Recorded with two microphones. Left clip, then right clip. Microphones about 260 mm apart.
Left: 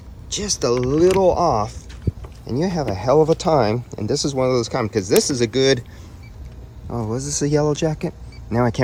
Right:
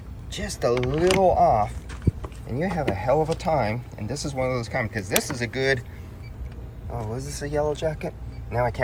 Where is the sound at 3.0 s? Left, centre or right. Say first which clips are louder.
Left 9 dB; centre.